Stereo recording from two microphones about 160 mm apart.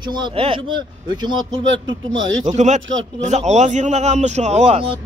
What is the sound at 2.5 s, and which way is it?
Speech, 45° right (ahead or behind).